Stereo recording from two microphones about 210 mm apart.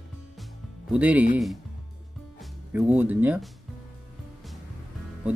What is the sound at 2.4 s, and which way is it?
Speech, 5° right (ahead or behind).